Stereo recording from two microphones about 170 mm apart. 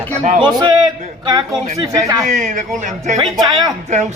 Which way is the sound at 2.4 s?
45° right (ahead or behind).